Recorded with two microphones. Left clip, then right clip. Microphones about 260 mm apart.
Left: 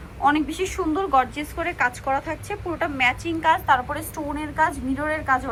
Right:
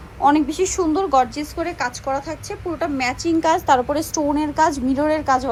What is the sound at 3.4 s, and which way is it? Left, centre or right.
A woman's voice, right.